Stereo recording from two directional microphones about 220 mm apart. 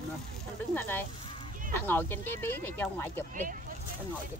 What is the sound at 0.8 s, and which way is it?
Speech, 10° left (ahead or behind).